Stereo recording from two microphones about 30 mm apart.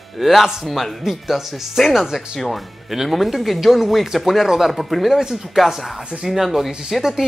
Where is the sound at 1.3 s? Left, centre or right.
Centre.